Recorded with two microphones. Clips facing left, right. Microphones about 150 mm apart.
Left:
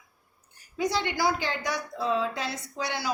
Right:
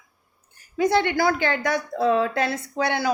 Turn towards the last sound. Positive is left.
turn(degrees=-55)  # may be behind; listen again after turning